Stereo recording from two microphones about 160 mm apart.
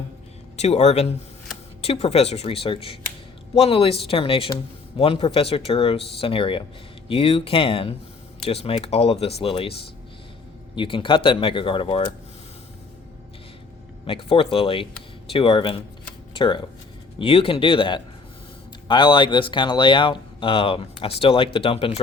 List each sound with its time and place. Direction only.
0.5 s speech: 45° left (ahead or behind)
10.8 s speech: 30° left (ahead or behind)
14.1 s speech: 35° left (ahead or behind)